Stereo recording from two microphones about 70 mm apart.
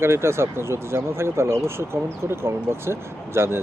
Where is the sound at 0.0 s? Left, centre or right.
Right.